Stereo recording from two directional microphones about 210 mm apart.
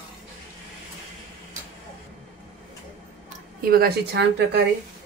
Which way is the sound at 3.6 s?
45° right (ahead or behind).